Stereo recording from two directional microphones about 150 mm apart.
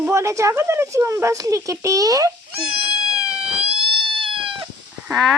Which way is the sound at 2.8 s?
40° right (ahead or behind).